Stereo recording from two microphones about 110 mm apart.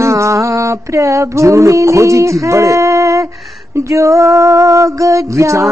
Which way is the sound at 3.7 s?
30° right (ahead or behind).